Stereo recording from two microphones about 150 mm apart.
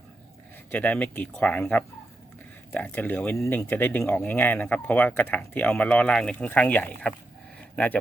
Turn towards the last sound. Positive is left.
turn(degrees=10)  # may be behind; listen again after turning